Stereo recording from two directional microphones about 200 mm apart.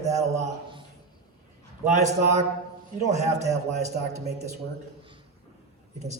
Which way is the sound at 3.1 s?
35° right (ahead or behind).